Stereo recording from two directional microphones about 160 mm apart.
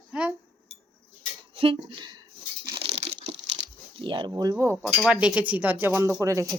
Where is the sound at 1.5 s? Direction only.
35° right (ahead or behind).